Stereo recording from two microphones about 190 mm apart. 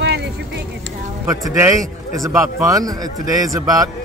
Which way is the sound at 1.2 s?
15° right (ahead or behind).